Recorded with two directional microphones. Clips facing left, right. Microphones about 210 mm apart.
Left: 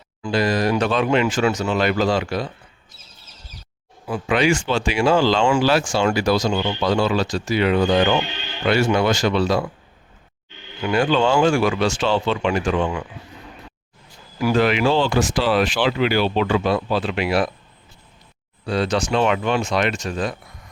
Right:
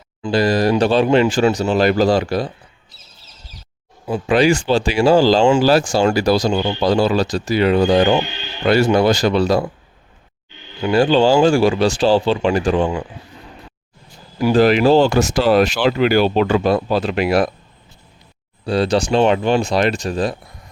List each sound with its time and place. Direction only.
0.3 s speech: 35° right (ahead or behind)
4.0 s speech: 30° right (ahead or behind)
10.8 s speech: 30° right (ahead or behind)
14.3 s speech: 35° right (ahead or behind)
18.6 s speech: 35° right (ahead or behind)